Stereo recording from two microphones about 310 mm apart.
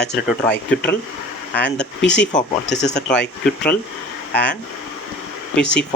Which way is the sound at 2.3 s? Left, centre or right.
Left.